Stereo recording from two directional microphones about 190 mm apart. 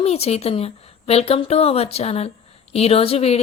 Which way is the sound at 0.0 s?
30° left (ahead or behind).